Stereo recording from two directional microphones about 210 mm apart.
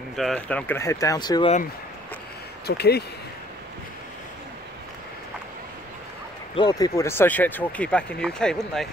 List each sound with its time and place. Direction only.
0.1 s speech: centre (ahead or behind); by 1.5 s 20° left (ahead or behind)
2.6 s speech: 50° left (ahead or behind)
6.5 s speech: 20° left (ahead or behind); by 8.8 s 5° left (ahead or behind)